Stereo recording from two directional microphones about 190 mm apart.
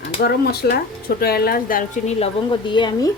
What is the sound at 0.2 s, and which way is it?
Speech, 55° left (ahead or behind).